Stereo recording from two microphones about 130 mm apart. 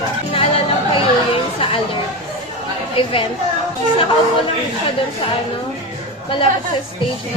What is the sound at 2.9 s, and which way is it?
Speech, 45° left (ahead or behind).